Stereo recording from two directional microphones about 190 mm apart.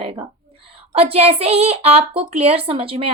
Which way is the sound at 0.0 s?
30° right (ahead or behind).